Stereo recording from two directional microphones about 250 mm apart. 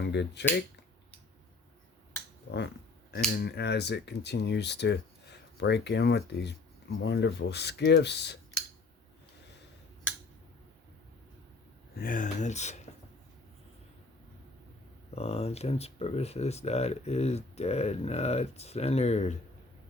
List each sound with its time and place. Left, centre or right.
0.0 s speech: left
2.5 s finger snapping: left
3.4 s speech: left
11.9 s speech: left
15.1 s speech: left